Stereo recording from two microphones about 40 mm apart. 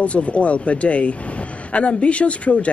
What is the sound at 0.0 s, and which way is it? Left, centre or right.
Speech, left.